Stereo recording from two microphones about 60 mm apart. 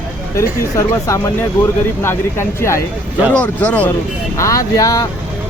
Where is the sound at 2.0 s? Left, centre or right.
Left.